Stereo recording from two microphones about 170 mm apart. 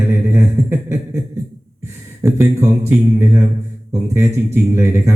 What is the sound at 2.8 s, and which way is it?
Speech, 15° right (ahead or behind).